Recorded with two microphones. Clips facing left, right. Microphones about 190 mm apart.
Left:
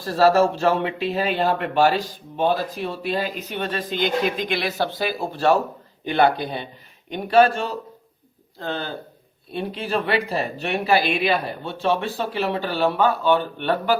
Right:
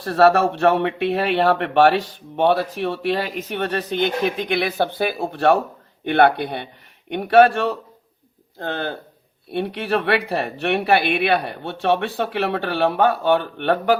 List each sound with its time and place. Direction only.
0.0 s speech: 65° right (ahead or behind)
9.5 s speech: 65° right (ahead or behind)